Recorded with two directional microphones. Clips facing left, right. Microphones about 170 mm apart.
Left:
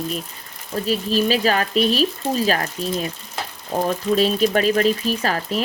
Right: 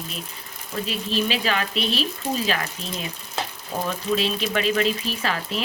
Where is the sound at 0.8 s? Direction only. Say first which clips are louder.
Left 5 dB; 40° left (ahead or behind).